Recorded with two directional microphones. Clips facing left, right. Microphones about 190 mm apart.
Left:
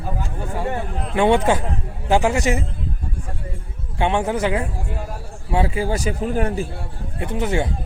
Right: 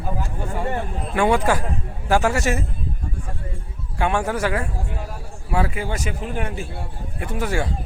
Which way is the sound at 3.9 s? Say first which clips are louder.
Left 2 dB; 20° left (ahead or behind).